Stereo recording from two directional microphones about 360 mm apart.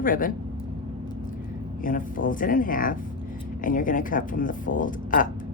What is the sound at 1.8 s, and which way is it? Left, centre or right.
Speech, left.